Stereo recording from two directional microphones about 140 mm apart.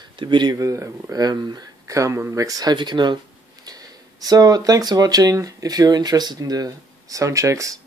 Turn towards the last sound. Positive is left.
turn(degrees=-20)  # may be behind; listen again after turning